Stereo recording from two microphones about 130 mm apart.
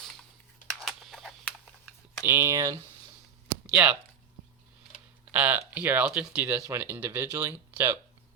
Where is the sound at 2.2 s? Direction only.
15° right (ahead or behind).